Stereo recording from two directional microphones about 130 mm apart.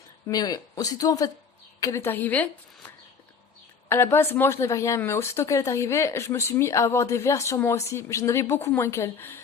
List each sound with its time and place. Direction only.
0.3 s a woman's voice: 30° left (ahead or behind)